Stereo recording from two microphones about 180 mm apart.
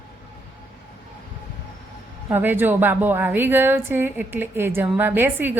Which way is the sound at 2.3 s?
10° right (ahead or behind).